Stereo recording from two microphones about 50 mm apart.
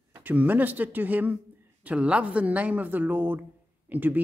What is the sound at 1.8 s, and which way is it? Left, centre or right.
A woman's voice, right.